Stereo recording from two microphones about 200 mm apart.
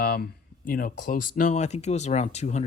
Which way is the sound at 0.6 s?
45° left (ahead or behind).